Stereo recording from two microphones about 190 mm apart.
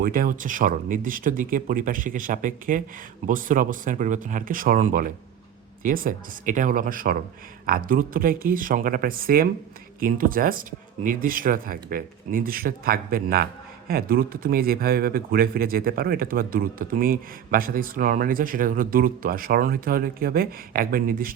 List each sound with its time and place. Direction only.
0.0 s speech: 45° right (ahead or behind)